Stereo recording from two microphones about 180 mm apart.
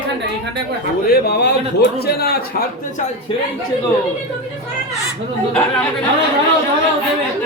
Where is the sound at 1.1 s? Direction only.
65° left (ahead or behind).